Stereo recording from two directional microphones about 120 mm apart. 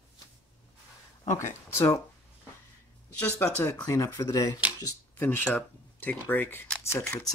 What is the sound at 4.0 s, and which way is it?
Speech, 25° left (ahead or behind).